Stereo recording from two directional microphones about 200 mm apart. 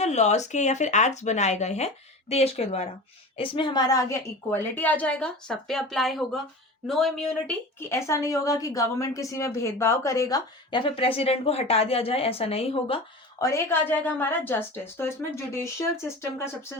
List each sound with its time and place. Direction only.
0.0 s a woman's voice: 35° left (ahead or behind); by 7.5 s centre (ahead or behind)
7.8 s a woman's voice: 15° left (ahead or behind); by 13.0 s 30° left (ahead or behind)
13.4 s a woman's voice: 15° left (ahead or behind)